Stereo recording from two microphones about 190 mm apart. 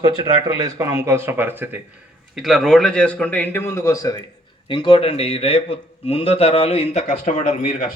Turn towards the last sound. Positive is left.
turn(degrees=40)  # may be behind; listen again after turning